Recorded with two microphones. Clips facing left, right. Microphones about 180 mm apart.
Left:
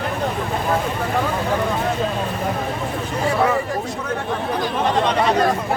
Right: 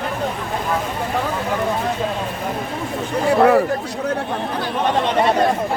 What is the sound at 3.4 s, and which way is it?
Speech, 60° right (ahead or behind).